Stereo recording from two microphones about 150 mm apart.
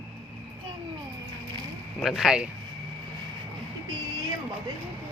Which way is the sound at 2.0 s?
Centre (ahead or behind).